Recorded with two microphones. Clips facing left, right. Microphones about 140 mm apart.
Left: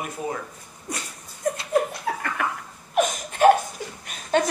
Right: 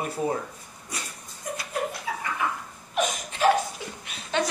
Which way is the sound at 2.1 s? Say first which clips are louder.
Left 4 dB; 60° left (ahead or behind).